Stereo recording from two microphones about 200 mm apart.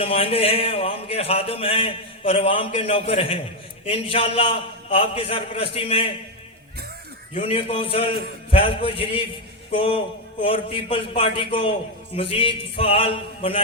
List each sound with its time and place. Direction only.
0.0 s a man's voice: 30° left (ahead or behind)
7.3 s a man's voice: 25° left (ahead or behind)